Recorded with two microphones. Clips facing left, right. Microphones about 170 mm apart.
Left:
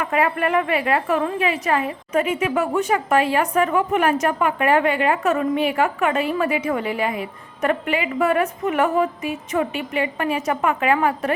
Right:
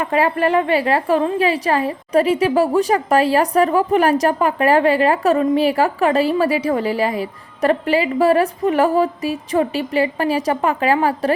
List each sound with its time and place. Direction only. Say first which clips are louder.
0.0 s a woman's voice: right 4 dB; 30° right (ahead or behind)